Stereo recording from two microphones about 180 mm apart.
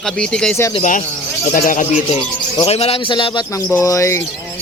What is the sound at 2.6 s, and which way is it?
A man's voice, 35° left (ahead or behind).